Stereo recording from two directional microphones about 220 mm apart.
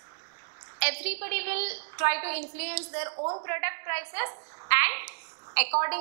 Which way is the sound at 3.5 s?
15° right (ahead or behind).